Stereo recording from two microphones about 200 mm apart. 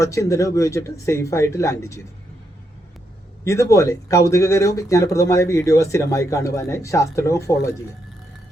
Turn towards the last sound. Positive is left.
turn(degrees=15)  # may be behind; listen again after turning